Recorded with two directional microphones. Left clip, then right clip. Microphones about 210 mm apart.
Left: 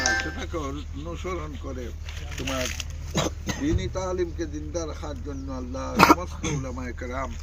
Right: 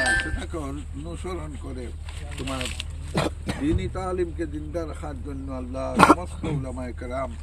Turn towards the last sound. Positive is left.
turn(degrees=-40)  # may be behind; listen again after turning